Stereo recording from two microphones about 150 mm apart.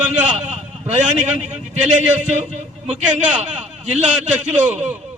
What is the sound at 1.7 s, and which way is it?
A man's voice, 50° right (ahead or behind).